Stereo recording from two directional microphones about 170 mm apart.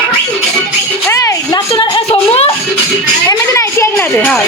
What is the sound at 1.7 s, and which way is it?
Music, 35° left (ahead or behind).